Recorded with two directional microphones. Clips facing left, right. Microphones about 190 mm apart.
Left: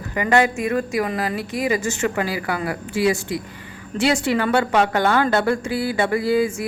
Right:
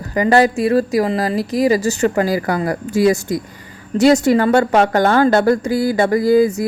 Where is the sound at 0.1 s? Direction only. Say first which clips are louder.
Right 5 dB; 35° right (ahead or behind).